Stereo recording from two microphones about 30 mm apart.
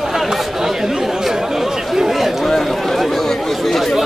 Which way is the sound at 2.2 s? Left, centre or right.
Centre.